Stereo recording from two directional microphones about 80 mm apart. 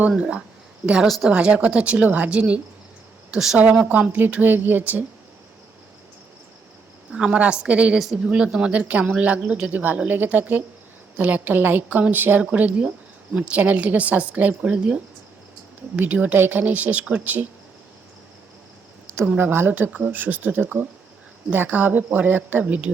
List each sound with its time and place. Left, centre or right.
0.2 s speech: centre
1.0 s speech: centre
1.3 s speech: centre
3.6 s a woman's voice: centre
7.1 s a woman's voice: centre
19.4 s a woman's voice: right